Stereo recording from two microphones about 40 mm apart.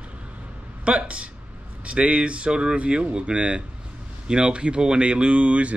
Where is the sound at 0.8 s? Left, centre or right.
Right.